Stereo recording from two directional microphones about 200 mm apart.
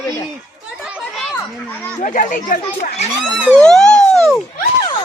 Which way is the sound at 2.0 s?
40° left (ahead or behind).